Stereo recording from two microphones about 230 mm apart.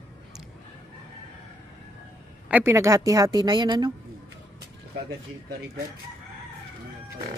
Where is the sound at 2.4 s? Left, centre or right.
Centre.